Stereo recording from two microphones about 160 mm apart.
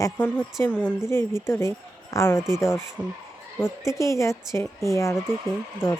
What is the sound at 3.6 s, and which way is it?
Speech, 20° left (ahead or behind).